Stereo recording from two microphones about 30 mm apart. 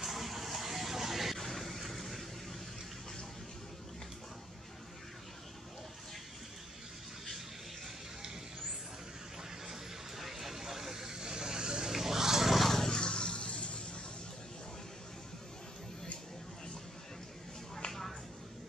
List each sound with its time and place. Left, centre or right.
0.0 s music: centre
1.4 s vehicle: centre
9.4 s vehicle: centre; by 11.9 s right
11.9 s vehicle: centre
12.5 s a sound: centre
13.1 s a sound: left